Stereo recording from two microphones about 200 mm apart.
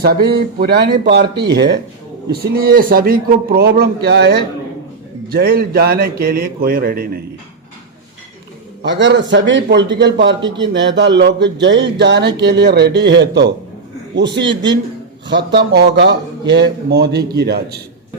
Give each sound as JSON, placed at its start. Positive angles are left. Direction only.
{"t": 0.3, "sound": "a man's voice", "side_deg": -55}
{"t": 8.8, "sound": "a man's voice", "side_deg": -65}
{"t": 15.3, "sound": "a man's voice", "side_deg": -55}